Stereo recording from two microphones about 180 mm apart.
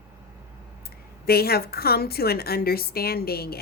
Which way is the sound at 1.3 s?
60° left (ahead or behind).